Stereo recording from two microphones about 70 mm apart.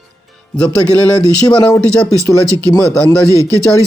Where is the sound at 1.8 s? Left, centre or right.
Centre.